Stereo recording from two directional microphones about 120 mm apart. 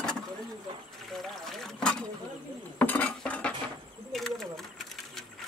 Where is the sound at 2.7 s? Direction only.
15° left (ahead or behind).